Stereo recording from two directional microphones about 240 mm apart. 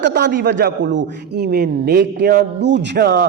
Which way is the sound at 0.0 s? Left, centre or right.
Right.